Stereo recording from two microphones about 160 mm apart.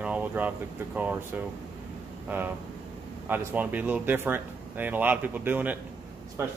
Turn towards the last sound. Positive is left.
turn(degrees=-15)  # may be behind; listen again after turning